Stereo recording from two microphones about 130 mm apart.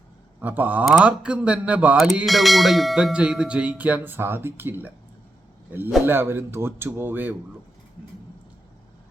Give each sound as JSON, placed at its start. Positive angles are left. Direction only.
{"t": 0.4, "sound": "speech", "side_deg": -10}